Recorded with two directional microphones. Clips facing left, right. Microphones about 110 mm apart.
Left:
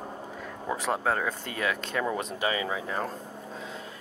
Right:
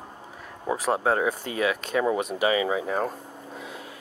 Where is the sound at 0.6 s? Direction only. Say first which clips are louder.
Right 4 dB; 10° right (ahead or behind).